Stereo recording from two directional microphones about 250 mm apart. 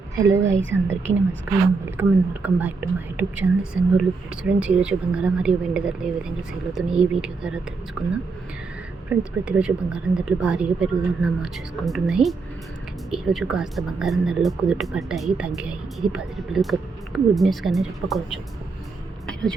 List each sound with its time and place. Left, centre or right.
0.2 s speech: centre
0.6 s a woman's voice: right
2.0 s speech: centre
9.0 s speech: centre
19.3 s vehicle: centre